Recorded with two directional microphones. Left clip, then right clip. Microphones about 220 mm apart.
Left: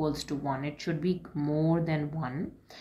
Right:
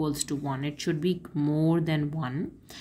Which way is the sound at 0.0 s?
35° right (ahead or behind).